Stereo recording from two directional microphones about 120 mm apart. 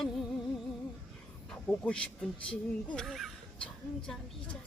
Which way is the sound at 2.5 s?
5° left (ahead or behind).